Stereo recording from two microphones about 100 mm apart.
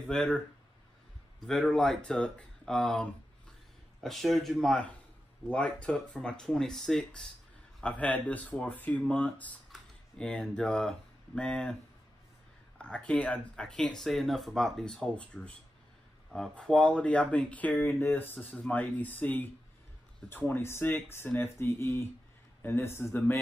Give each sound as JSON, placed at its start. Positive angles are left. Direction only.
{"t": 0.0, "sound": "speech", "side_deg": 10}
{"t": 1.4, "sound": "speech", "side_deg": 5}
{"t": 12.7, "sound": "speech", "side_deg": 10}